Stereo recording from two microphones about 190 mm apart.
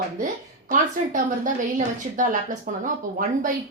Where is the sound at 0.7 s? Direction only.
45° right (ahead or behind).